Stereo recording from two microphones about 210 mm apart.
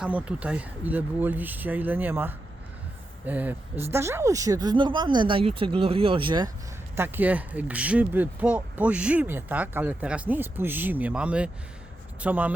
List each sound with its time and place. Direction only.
0.0 s speech: 5° right (ahead or behind); by 6.5 s 20° right (ahead or behind)
6.9 s speech: 10° right (ahead or behind)